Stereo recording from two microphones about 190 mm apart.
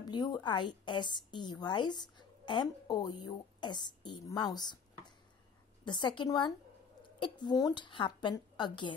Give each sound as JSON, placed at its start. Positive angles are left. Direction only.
{"t": 0.0, "sound": "a woman's voice", "side_deg": 20}
{"t": 5.9, "sound": "a woman's voice", "side_deg": 25}